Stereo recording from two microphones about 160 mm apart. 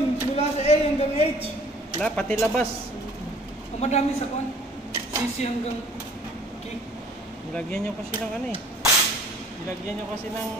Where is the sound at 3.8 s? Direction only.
45° left (ahead or behind).